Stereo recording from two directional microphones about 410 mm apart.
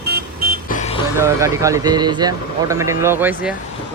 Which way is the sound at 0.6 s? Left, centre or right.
Centre.